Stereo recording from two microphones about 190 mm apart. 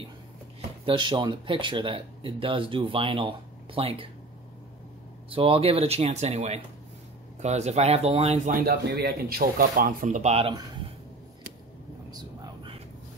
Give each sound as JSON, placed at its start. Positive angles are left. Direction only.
{"t": 0.8, "sound": "speech", "side_deg": -25}
{"t": 5.3, "sound": "speech", "side_deg": -30}
{"t": 12.1, "sound": "a sound", "side_deg": -20}